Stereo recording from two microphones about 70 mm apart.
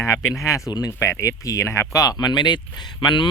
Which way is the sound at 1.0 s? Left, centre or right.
Left.